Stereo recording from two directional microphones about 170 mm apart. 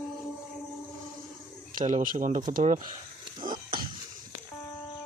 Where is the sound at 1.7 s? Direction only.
50° right (ahead or behind).